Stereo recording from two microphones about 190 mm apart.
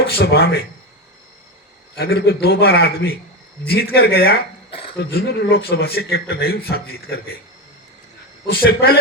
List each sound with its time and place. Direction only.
0.2 s a man's voice: 55° left (ahead or behind)
2.0 s a man's voice: 55° left (ahead or behind)
4.7 s a sound: 30° left (ahead or behind)
5.1 s a man's voice: 55° left (ahead or behind)
8.4 s a man's voice: 55° left (ahead or behind)